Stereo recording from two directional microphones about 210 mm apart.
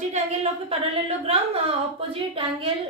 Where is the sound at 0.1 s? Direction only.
30° right (ahead or behind).